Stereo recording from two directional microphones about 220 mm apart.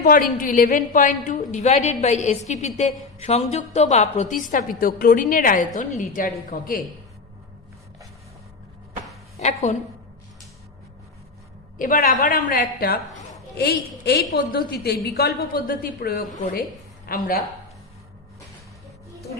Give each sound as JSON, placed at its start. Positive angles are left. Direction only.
{"t": 0.0, "sound": "a woman's voice", "side_deg": 40}
{"t": 9.4, "sound": "a woman's voice", "side_deg": 30}
{"t": 11.8, "sound": "a woman's voice", "side_deg": 40}